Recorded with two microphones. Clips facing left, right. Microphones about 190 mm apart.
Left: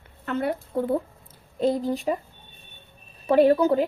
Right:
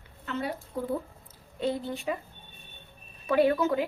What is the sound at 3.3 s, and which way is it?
Speech, 35° left (ahead or behind).